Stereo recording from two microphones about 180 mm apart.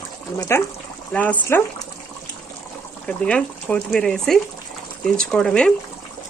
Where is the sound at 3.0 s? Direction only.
5° left (ahead or behind).